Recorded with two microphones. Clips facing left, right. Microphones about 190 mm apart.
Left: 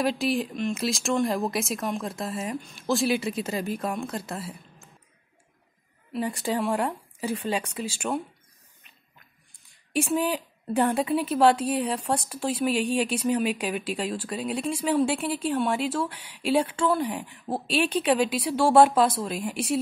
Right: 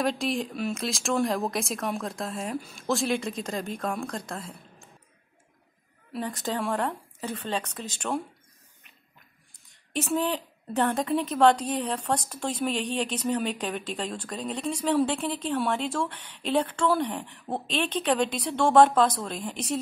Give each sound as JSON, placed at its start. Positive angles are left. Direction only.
{"t": 0.0, "sound": "speech", "side_deg": 0}
{"t": 6.1, "sound": "a woman's voice", "side_deg": 10}
{"t": 9.9, "sound": "a woman's voice", "side_deg": 10}